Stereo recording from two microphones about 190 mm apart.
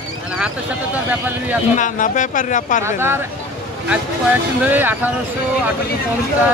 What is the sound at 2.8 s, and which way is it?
Speech, 15° right (ahead or behind).